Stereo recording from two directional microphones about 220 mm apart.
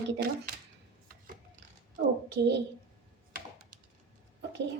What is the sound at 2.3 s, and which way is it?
Speech, 50° right (ahead or behind).